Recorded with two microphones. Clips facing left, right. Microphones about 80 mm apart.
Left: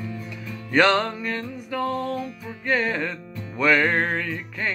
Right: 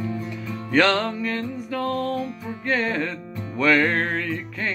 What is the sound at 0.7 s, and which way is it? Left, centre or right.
Music, centre.